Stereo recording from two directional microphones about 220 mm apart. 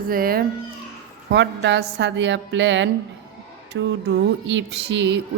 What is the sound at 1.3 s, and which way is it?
A woman's voice, 55° right (ahead or behind).